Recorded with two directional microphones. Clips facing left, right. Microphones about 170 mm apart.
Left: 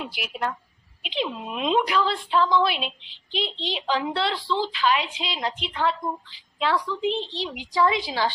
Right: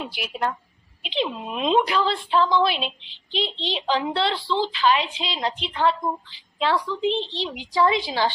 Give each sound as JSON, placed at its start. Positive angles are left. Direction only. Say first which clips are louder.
{"t": 0.2, "sound": "a woman's voice", "louder": "right 3 dB", "side_deg": -30}